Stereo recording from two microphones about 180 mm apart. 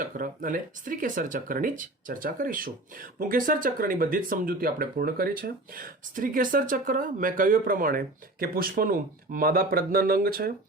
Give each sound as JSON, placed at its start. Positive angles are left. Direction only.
{"t": 0.0, "sound": "speech", "side_deg": -50}